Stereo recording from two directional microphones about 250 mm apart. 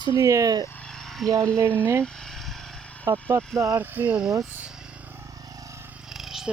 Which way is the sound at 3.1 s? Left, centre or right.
Centre.